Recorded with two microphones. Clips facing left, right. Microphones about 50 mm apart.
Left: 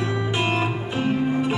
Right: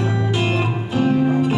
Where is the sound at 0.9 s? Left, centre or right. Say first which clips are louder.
Right 6 dB; left.